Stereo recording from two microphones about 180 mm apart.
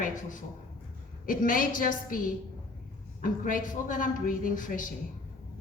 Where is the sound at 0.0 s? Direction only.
50° left (ahead or behind).